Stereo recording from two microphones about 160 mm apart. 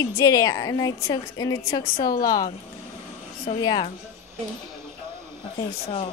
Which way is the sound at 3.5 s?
40° left (ahead or behind).